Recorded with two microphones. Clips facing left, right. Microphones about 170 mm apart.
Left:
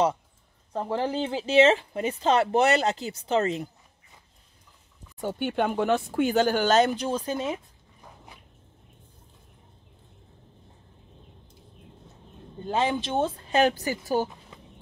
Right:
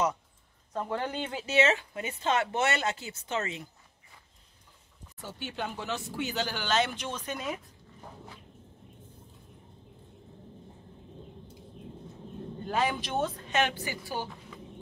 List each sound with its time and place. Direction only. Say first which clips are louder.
0.7 s speech: left 5 dB; 30° left (ahead or behind)
5.2 s speech: left 11 dB; 55° left (ahead or behind); by 7.6 s 30° left (ahead or behind)
12.6 s speech: left 4 dB; 25° left (ahead or behind); by 14.3 s 45° left (ahead or behind)